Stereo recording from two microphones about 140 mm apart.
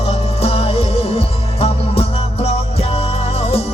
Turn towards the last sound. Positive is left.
turn(degrees=45)  # may be behind; listen again after turning